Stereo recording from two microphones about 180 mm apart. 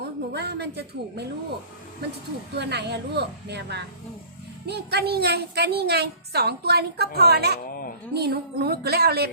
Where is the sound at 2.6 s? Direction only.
70° right (ahead or behind).